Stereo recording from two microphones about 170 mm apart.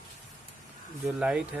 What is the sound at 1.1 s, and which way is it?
Speech, 5° right (ahead or behind).